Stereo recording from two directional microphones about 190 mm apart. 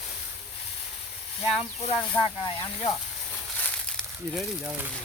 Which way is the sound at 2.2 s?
30° left (ahead or behind).